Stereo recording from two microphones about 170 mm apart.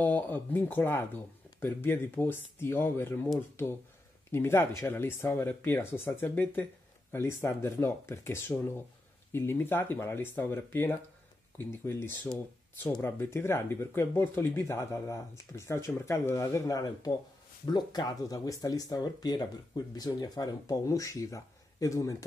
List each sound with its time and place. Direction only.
0.0 s speech: 10° left (ahead or behind)
4.3 s speech: 15° left (ahead or behind)